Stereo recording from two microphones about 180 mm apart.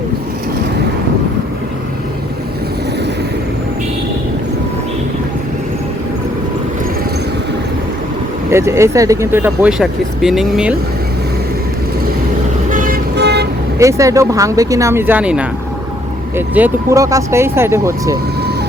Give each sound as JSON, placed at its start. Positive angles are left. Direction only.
{"t": 8.4, "sound": "speech", "side_deg": -15}
{"t": 12.7, "sound": "vehicle", "side_deg": -50}
{"t": 13.7, "sound": "speech", "side_deg": -20}
{"t": 16.6, "sound": "speech", "side_deg": -15}